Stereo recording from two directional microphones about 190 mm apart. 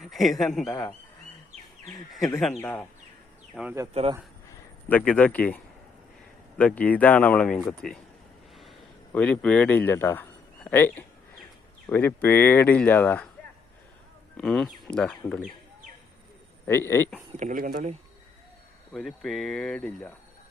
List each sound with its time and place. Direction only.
0.0 s speech: centre (ahead or behind)
2.5 s speech: 10° left (ahead or behind)
3.5 s speech: 5° right (ahead or behind)
4.9 s speech: 10° left (ahead or behind)
6.6 s speech: 5° left (ahead or behind)
9.1 s a man's voice: 5° left (ahead or behind)
14.3 s speech: centre (ahead or behind)
16.6 s speech: 10° left (ahead or behind)
17.3 s speech: 45° right (ahead or behind)
18.9 s speech: centre (ahead or behind)